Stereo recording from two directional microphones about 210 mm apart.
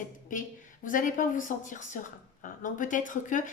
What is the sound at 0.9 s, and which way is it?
A woman's voice, 40° left (ahead or behind).